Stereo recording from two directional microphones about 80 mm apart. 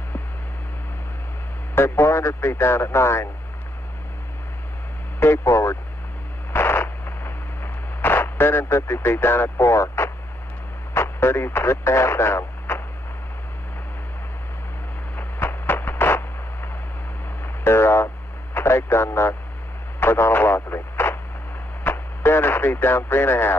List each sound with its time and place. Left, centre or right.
1.8 s speech: left
5.2 s speech: left
6.5 s radio: left
10.9 s speech: left
15.1 s a sound: left
20.0 s speech: left